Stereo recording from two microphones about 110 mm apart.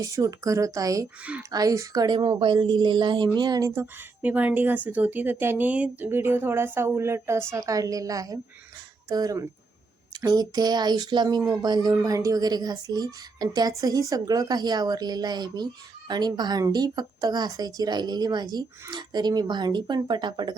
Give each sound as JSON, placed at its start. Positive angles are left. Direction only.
{"t": 0.0, "sound": "speech", "side_deg": -30}
{"t": 3.8, "sound": "a woman's voice", "side_deg": -15}